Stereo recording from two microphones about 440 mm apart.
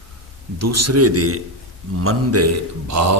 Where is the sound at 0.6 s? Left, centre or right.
Right.